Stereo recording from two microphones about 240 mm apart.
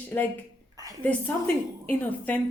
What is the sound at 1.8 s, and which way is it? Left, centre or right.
Speech, centre.